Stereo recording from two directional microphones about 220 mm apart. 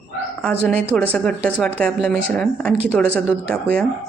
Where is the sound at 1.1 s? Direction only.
5° left (ahead or behind).